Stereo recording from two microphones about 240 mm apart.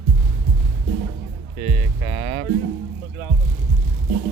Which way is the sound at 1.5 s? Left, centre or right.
Right.